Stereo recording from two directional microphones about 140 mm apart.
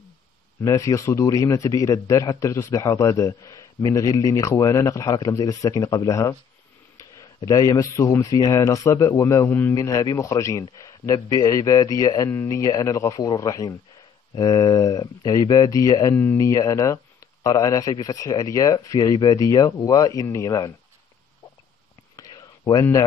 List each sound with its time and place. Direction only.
0.7 s speech: 20° left (ahead or behind)
7.3 s speech: 25° left (ahead or behind)
22.1 s a sound: 30° left (ahead or behind)